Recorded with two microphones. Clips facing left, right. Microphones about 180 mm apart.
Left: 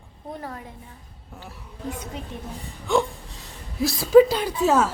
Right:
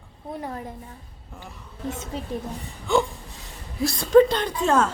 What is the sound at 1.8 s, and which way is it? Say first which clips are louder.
Speech: right 2 dB; 25° right (ahead or behind).